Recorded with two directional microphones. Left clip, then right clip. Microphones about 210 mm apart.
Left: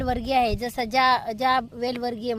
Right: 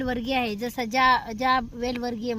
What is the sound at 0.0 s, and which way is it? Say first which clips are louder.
Speech: left 4 dB; 35° left (ahead or behind).